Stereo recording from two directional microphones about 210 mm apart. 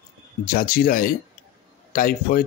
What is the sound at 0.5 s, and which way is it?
Speech, 45° left (ahead or behind).